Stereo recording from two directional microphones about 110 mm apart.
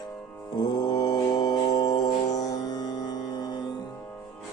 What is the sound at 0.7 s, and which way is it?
Mantra, 35° left (ahead or behind).